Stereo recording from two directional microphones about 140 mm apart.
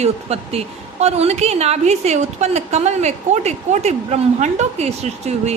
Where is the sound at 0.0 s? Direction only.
50° right (ahead or behind).